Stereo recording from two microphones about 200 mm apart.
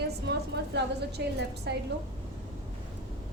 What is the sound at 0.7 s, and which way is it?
A woman's voice, 55° right (ahead or behind).